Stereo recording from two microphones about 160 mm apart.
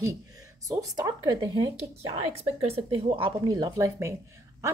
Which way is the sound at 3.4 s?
20° right (ahead or behind).